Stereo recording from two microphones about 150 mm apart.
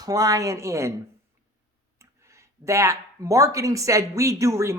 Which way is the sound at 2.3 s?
20° right (ahead or behind).